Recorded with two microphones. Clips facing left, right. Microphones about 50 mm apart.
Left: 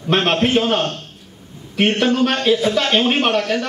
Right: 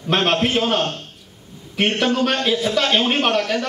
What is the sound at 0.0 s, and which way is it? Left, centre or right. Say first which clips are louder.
A man's voice: left 2 dB; centre.